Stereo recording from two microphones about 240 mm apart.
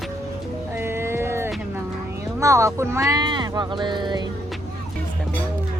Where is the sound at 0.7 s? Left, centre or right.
Centre.